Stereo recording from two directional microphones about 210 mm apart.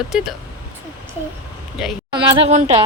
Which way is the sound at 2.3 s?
30° right (ahead or behind).